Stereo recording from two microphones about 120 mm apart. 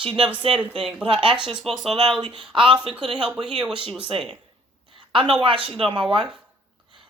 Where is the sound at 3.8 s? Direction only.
5° right (ahead or behind).